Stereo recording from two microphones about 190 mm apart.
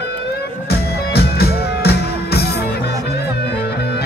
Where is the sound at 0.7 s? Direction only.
55° left (ahead or behind).